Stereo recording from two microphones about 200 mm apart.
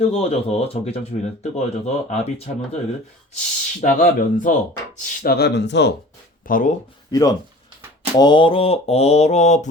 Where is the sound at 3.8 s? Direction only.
40° left (ahead or behind); by 5.9 s 60° left (ahead or behind).